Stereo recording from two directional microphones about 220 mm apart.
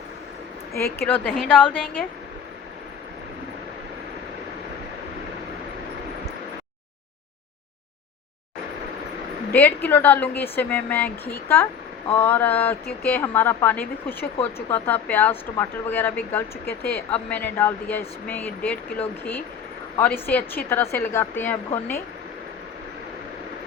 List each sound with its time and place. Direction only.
0.7 s speech: 45° left (ahead or behind)
1.0 s a woman's voice: 5° left (ahead or behind)
9.5 s a woman's voice: 10° left (ahead or behind)